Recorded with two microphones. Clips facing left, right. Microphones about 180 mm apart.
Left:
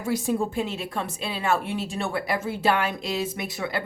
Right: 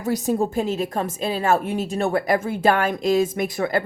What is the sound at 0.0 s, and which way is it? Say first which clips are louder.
A woman's voice: right 3 dB; 40° right (ahead or behind).